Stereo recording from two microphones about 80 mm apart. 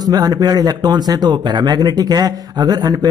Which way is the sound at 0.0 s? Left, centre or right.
Right.